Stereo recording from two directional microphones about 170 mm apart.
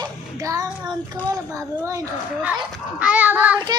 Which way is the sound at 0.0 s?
20° right (ahead or behind).